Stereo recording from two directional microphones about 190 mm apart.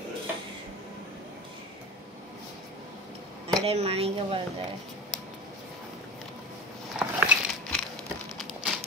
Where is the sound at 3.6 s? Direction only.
35° right (ahead or behind).